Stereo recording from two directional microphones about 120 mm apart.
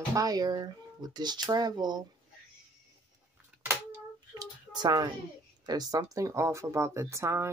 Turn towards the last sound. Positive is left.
turn(degrees=-25)  # may be behind; listen again after turning